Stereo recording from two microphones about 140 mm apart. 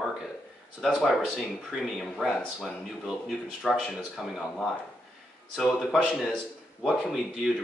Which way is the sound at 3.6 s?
Centre (ahead or behind).